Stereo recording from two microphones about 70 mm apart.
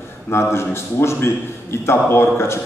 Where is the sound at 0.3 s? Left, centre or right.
Left.